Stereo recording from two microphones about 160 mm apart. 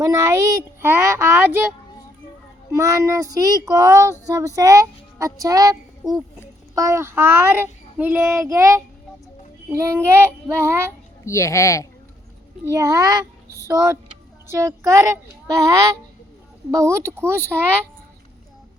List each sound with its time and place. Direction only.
0.0 s child singing: 15° right (ahead or behind)
2.7 s child singing: 20° right (ahead or behind)
6.7 s child singing: 20° right (ahead or behind)
11.3 s speech: 20° left (ahead or behind)
12.6 s child singing: 20° right (ahead or behind)
14.4 s speech: 15° right (ahead or behind)
14.8 s child singing: 20° right (ahead or behind)